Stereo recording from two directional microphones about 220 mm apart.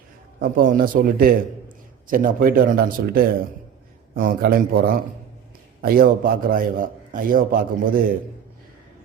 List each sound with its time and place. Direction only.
0.5 s a man's voice: 40° right (ahead or behind)